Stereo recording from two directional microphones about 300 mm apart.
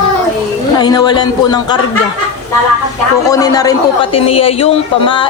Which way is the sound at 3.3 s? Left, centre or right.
Centre.